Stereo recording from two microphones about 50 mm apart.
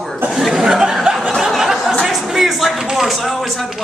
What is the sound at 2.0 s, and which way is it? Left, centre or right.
Speech, centre.